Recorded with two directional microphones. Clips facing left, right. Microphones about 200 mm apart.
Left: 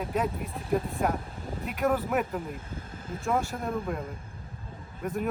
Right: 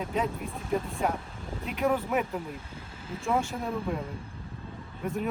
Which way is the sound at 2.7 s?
50° left (ahead or behind).